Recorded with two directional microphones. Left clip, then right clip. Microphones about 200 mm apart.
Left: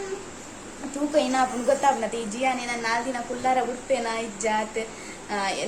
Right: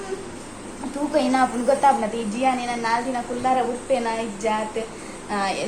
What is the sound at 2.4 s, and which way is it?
A woman's voice, 5° left (ahead or behind).